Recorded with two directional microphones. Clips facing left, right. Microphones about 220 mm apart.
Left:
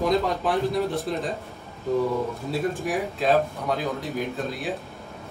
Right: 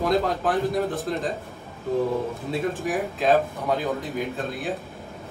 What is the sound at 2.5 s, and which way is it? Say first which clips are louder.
A man's voice: even; centre (ahead or behind).